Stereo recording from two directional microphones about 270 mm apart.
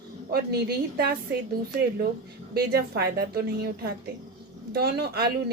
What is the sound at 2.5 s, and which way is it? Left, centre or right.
A woman's voice, right.